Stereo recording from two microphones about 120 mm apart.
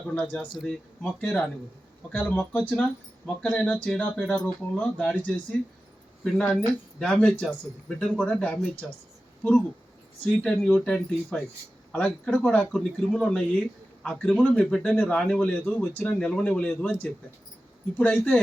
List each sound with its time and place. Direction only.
0.1 s speech: 10° left (ahead or behind)
2.4 s speech: 10° left (ahead or behind)
7.0 s speech: 10° left (ahead or behind)